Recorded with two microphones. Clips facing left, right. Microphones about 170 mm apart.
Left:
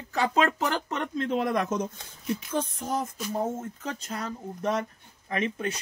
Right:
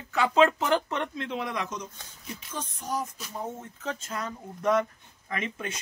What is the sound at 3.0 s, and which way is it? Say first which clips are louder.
Speech: left 6 dB; 45° left (ahead or behind).